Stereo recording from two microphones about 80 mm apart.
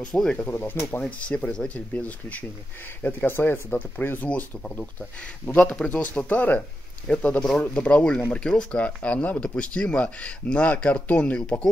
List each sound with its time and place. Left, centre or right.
0.0 s speech: centre
0.5 s speech: left
1.0 s speech: centre